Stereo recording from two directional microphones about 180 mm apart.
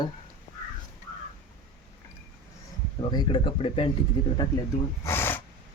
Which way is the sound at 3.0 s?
25° left (ahead or behind).